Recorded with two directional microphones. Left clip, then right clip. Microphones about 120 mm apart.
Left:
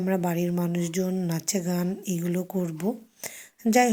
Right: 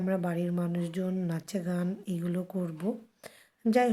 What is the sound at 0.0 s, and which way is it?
A woman's voice, 25° left (ahead or behind).